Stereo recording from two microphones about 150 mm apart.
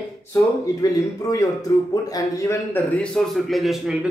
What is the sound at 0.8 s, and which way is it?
A man's voice, 25° left (ahead or behind).